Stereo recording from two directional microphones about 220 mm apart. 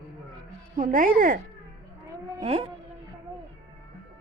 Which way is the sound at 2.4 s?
30° right (ahead or behind).